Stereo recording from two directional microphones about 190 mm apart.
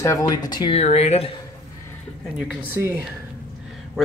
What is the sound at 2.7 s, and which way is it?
Speech, 15° right (ahead or behind).